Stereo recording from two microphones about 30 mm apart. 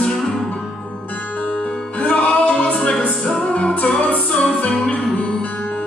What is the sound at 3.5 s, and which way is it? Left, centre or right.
Music, left.